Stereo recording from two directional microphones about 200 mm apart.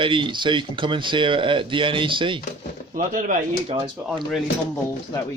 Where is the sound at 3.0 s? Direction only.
40° right (ahead or behind).